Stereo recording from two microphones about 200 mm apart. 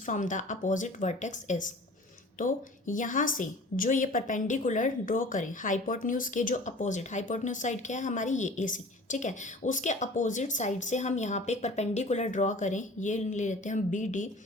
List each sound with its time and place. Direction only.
0.0 s a woman's voice: 40° left (ahead or behind)